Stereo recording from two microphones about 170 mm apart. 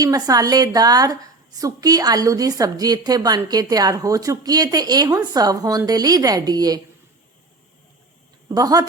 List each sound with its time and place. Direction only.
0.0 s a woman's voice: 20° right (ahead or behind)
8.4 s a woman's voice: 20° right (ahead or behind)